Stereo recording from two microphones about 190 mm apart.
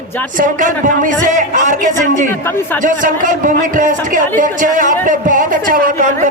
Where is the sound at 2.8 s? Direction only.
45° right (ahead or behind).